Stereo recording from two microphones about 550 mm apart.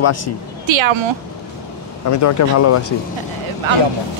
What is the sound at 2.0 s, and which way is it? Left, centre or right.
Speech, left.